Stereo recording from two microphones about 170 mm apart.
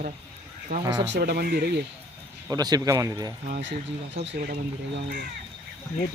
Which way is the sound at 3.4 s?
75° right (ahead or behind).